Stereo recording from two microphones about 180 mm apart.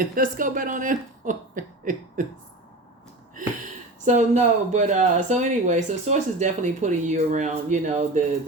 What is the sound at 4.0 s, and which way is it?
Speech, 40° right (ahead or behind).